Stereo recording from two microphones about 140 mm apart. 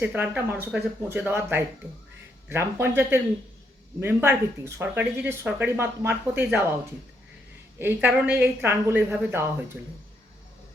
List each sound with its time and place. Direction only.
0.0 s speech: 10° right (ahead or behind)
7.8 s speech: 15° right (ahead or behind)